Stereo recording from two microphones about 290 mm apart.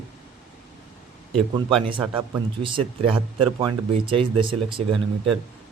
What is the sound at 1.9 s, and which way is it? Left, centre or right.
Speech, centre.